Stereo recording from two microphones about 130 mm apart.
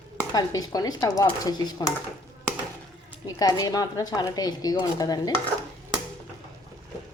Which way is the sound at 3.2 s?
30° left (ahead or behind).